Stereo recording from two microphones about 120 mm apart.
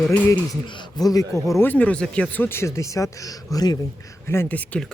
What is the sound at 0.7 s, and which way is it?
Speech, 35° left (ahead or behind).